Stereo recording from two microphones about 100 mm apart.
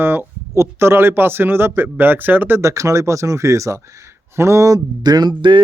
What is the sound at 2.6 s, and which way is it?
Speech, 30° right (ahead or behind).